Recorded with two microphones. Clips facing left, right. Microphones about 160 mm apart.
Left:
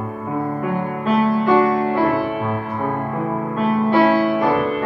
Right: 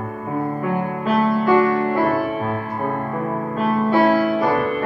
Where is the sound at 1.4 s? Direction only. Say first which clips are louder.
Left 1 dB; 20° left (ahead or behind).